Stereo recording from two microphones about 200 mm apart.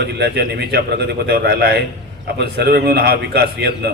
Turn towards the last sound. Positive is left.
turn(degrees=-55)  # may be behind; listen again after turning